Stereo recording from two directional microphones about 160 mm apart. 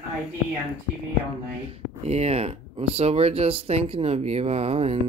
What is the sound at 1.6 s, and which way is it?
Speech, 40° right (ahead or behind).